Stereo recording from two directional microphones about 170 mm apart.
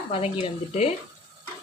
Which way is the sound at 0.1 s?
35° left (ahead or behind).